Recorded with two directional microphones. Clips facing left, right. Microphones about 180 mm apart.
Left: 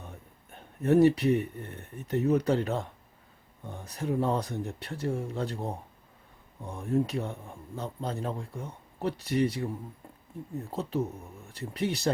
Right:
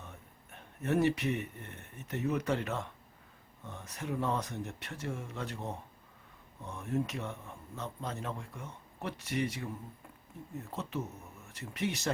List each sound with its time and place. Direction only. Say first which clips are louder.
0.5 s speech: left 8 dB; 35° left (ahead or behind)
10.7 s speech: left 7 dB; 35° left (ahead or behind)